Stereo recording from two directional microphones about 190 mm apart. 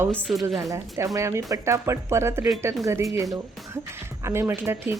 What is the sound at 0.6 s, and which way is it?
Speech, 15° right (ahead or behind).